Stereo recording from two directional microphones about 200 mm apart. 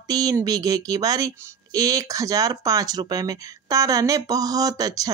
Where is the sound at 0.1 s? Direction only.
15° right (ahead or behind).